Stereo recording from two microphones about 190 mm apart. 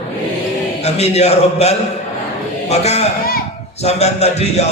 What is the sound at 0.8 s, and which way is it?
A man's voice, 35° left (ahead or behind).